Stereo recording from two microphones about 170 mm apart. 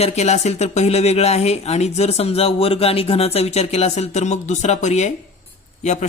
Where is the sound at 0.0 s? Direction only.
40° left (ahead or behind).